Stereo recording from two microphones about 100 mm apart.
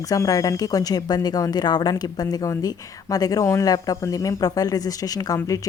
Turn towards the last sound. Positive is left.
turn(degrees=35)  # may be behind; listen again after turning